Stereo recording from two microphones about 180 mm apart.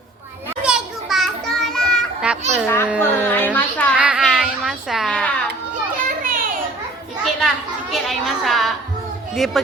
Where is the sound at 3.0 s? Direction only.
10° left (ahead or behind).